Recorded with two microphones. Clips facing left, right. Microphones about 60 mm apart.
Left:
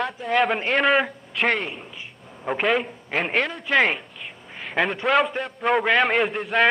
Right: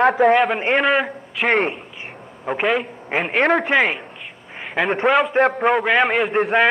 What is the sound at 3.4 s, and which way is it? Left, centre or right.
Speech, right.